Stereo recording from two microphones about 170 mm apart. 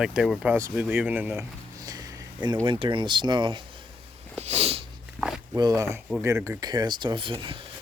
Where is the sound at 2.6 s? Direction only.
30° right (ahead or behind).